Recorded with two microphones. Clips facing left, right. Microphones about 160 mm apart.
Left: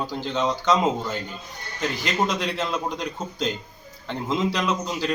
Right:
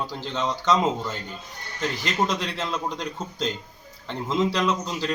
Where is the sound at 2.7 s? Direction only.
5° left (ahead or behind).